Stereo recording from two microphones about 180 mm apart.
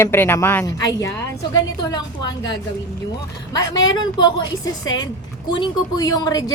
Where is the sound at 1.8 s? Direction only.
25° left (ahead or behind).